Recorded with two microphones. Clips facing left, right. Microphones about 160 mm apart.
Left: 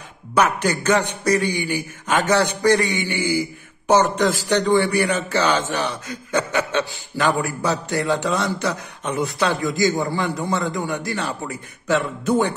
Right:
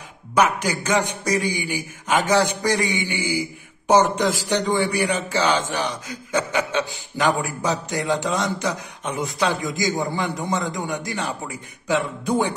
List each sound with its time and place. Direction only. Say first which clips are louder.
0.3 s a man's voice: left 1 dB; 10° right (ahead or behind)